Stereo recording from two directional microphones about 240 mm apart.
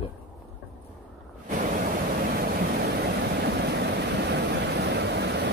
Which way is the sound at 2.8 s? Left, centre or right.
Right.